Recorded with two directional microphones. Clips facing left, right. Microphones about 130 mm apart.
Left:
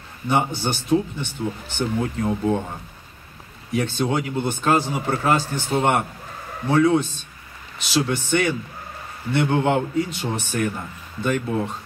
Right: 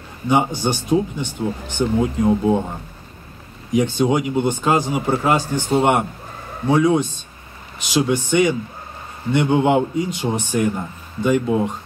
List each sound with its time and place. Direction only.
0.3 s speech: 15° right (ahead or behind)
3.7 s speech: 15° right (ahead or behind)